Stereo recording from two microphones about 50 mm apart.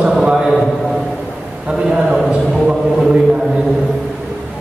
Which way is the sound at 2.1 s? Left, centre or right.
Centre.